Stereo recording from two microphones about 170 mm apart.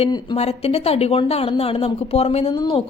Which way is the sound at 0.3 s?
35° left (ahead or behind).